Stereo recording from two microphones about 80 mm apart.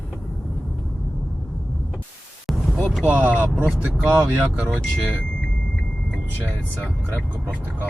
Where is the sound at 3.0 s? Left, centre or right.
Centre.